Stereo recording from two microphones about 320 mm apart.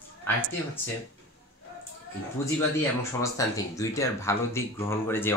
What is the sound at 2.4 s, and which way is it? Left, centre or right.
Speech, centre.